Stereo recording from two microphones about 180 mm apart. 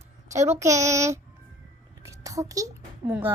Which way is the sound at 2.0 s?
15° right (ahead or behind).